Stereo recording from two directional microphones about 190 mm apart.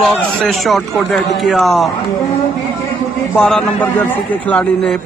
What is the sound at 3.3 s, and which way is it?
A man's voice, 5° left (ahead or behind).